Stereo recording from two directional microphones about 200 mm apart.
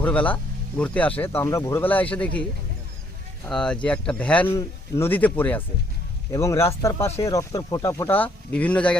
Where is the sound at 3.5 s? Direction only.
5° left (ahead or behind).